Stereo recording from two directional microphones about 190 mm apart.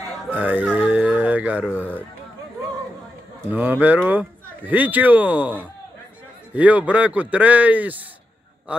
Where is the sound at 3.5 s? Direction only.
10° right (ahead or behind).